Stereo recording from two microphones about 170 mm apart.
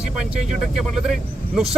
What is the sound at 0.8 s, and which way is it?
Speech, centre (ahead or behind).